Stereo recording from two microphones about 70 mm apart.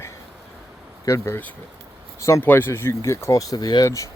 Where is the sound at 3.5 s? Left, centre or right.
Left.